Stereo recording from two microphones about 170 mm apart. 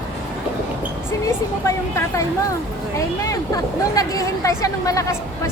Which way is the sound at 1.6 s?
15° left (ahead or behind).